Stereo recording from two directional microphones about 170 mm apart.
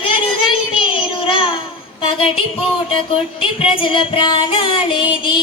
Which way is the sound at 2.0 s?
30° left (ahead or behind).